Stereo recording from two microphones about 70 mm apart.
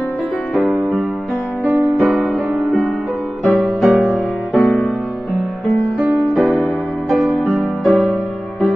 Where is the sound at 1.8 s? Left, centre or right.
Centre.